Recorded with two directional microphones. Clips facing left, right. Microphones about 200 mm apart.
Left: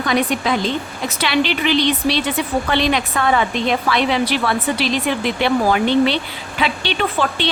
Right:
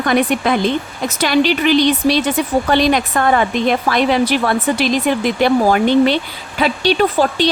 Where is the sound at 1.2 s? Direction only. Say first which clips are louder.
Right 5 dB; 45° right (ahead or behind).